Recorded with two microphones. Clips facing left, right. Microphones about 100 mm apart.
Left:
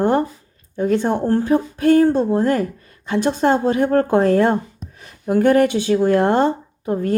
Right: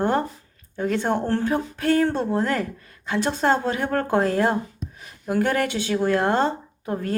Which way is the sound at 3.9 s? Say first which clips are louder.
Left 5 dB; 45° left (ahead or behind).